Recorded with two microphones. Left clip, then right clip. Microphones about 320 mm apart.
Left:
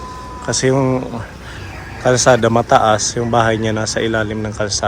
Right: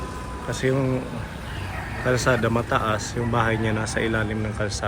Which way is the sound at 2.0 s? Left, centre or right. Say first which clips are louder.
Left 10 dB; centre.